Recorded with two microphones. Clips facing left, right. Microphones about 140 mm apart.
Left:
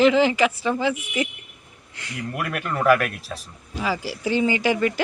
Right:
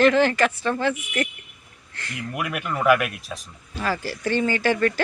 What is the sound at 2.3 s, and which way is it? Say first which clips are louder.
Speech: even; 5° right (ahead or behind).